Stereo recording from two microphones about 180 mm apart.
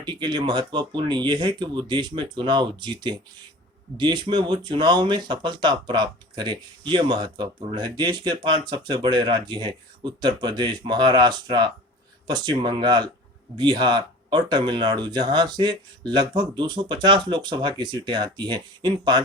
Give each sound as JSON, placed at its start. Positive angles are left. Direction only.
{"t": 0.0, "sound": "speech", "side_deg": -25}